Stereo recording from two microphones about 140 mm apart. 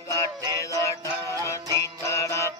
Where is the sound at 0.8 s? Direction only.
20° left (ahead or behind).